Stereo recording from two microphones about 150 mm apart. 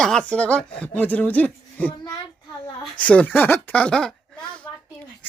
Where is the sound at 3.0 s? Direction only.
10° left (ahead or behind).